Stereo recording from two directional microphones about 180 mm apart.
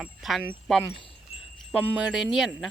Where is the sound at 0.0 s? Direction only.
Centre (ahead or behind).